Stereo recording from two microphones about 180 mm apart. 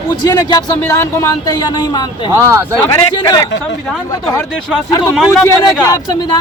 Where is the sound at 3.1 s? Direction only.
20° left (ahead or behind).